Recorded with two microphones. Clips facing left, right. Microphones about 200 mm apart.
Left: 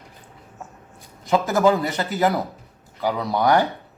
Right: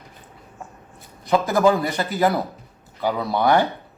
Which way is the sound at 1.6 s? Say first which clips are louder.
Even; 20° left (ahead or behind).